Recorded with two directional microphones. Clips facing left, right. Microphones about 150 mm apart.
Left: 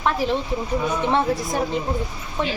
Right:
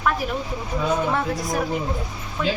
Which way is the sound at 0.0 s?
25° left (ahead or behind).